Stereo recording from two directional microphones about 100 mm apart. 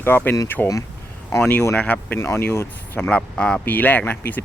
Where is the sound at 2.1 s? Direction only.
25° left (ahead or behind).